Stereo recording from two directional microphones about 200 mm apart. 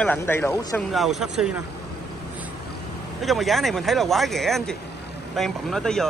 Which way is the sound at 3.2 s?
Centre (ahead or behind).